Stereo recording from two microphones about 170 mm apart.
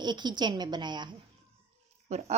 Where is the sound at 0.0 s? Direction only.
25° right (ahead or behind).